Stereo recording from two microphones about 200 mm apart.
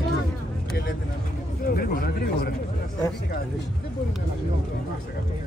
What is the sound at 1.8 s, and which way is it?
Speech, 50° left (ahead or behind).